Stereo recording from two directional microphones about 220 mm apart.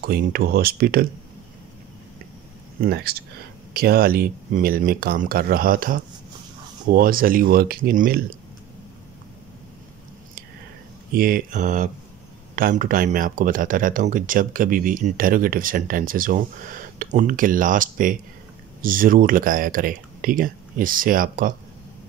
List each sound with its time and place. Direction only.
0.0 s speech: 40° right (ahead or behind)
2.8 s speech: 45° right (ahead or behind)
11.1 s speech: 40° right (ahead or behind)